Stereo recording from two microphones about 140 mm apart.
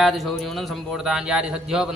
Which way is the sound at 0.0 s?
Centre (ahead or behind).